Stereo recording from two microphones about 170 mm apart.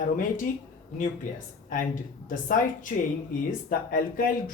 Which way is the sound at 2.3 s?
55° left (ahead or behind).